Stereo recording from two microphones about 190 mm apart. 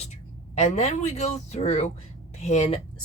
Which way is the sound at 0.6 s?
35° left (ahead or behind).